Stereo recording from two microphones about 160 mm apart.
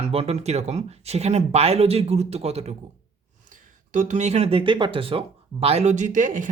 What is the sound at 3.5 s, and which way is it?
Speech, 50° right (ahead or behind).